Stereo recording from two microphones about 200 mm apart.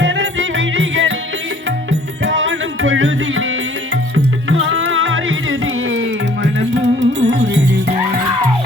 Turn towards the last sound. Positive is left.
turn(degrees=-65)  # may be behind; listen again after turning